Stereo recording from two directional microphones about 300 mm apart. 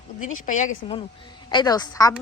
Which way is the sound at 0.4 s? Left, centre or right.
Left.